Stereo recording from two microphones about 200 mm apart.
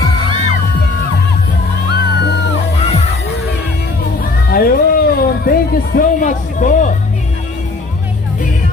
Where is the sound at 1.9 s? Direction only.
55° left (ahead or behind).